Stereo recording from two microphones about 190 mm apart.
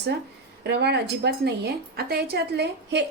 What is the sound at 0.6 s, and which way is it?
A woman's voice, 60° right (ahead or behind).